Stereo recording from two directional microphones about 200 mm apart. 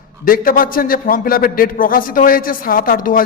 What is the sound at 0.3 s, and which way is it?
A man's voice, 45° left (ahead or behind).